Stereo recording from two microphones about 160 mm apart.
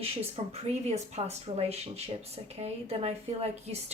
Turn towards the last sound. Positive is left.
turn(degrees=-40)  # may be behind; listen again after turning